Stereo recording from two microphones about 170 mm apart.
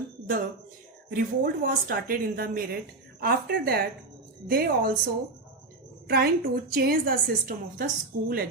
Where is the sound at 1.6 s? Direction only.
55° right (ahead or behind).